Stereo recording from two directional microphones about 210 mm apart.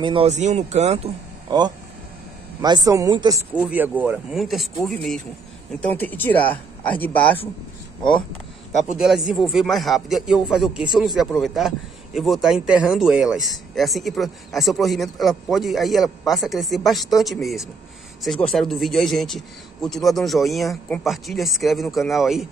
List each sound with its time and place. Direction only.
0.0 s speech: 25° right (ahead or behind)
3.5 s speech: 5° right (ahead or behind); by 7.3 s 10° left (ahead or behind)
8.9 s speech: centre (ahead or behind)